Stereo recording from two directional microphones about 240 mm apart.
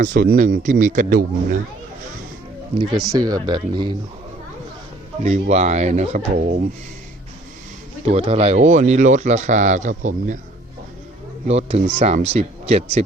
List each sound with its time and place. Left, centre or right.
0.0 s speech: right
3.1 s speech: centre
5.2 s speech: right
8.0 s speech: right
11.4 s speech: right